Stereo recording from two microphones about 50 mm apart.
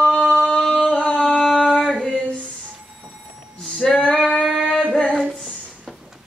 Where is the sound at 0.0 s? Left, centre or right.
Left.